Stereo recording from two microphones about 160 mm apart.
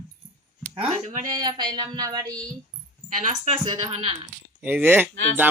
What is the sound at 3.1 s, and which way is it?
Speech, 50° right (ahead or behind).